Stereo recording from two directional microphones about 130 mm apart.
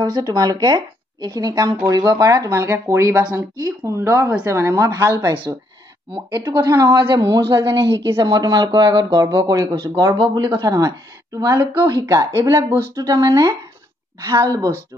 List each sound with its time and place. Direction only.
0.0 s speech: 30° right (ahead or behind)
6.1 s a woman's voice: 35° right (ahead or behind)